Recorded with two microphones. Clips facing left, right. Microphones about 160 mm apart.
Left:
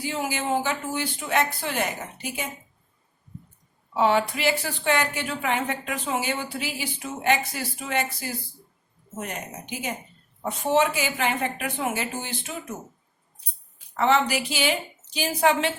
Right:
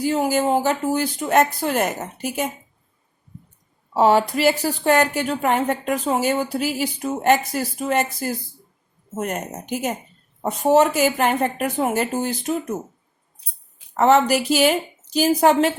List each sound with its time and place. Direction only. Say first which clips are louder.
0.0 s a woman's voice: right 9 dB; 40° right (ahead or behind)
3.9 s a woman's voice: right 5 dB; 40° right (ahead or behind)
13.9 s a woman's voice: right 6 dB; 40° right (ahead or behind)